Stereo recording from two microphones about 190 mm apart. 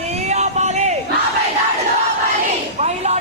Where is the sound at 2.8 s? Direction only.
35° right (ahead or behind).